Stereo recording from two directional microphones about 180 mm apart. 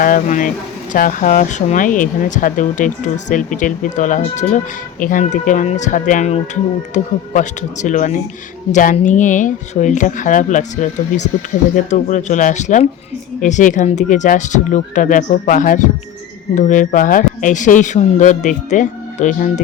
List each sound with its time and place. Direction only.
0.0 s speech: 45° left (ahead or behind)